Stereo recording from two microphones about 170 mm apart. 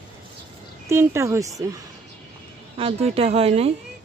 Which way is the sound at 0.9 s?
15° right (ahead or behind).